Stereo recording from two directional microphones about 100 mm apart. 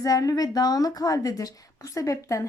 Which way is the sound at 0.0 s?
35° left (ahead or behind).